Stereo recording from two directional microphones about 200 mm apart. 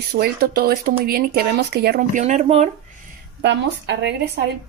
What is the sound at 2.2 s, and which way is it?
Speech, 35° right (ahead or behind).